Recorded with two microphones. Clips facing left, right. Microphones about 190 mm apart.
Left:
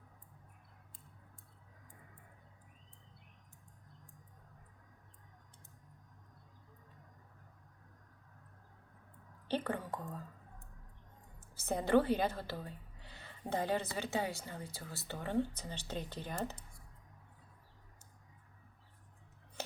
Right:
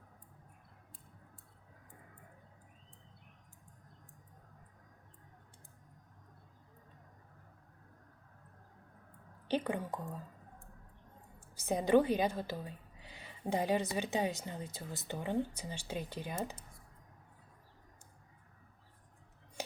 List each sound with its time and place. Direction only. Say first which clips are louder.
9.5 s a woman's voice: right 2 dB; 15° right (ahead or behind)
11.5 s a woman's voice: right 2 dB; 15° right (ahead or behind)